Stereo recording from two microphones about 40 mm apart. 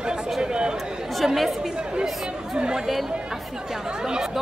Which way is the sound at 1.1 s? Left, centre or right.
Centre.